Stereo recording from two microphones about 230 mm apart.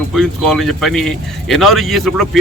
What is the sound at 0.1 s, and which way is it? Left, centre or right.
Speech, centre.